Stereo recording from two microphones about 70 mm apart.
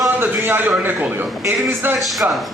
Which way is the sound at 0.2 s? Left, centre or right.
Right.